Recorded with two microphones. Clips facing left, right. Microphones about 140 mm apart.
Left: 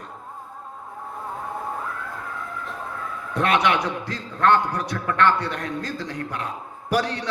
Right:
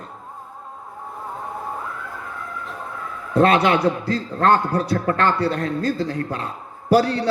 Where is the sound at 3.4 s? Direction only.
30° right (ahead or behind).